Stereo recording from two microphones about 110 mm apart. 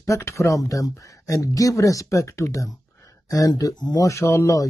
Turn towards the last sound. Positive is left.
turn(degrees=25)  # may be behind; listen again after turning